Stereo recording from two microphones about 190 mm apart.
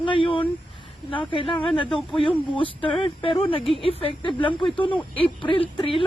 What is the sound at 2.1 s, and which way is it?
Speech, centre (ahead or behind).